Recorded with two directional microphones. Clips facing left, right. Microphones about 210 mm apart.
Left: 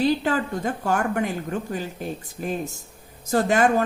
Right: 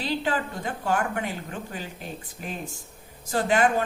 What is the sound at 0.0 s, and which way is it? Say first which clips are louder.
A woman's voice: left 6 dB; 45° left (ahead or behind).